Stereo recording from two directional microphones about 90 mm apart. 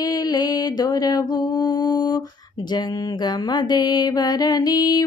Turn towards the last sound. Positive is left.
turn(degrees=45)  # may be behind; listen again after turning